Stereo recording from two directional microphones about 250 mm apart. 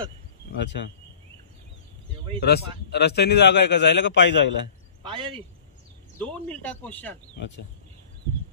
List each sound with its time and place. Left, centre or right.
0.6 s a man's voice: left
2.4 s a man's voice: left
5.0 s speech: centre
6.1 s speech: centre